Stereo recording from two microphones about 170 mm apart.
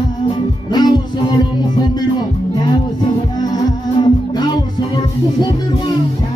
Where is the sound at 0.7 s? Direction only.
25° left (ahead or behind).